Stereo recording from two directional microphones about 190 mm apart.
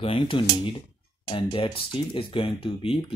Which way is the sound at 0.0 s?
25° left (ahead or behind).